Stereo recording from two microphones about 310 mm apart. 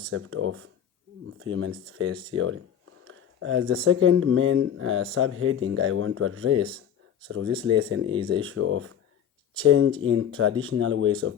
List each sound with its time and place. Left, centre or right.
0.1 s speech: right